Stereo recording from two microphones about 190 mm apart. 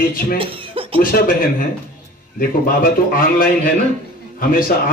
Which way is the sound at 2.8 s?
50° left (ahead or behind).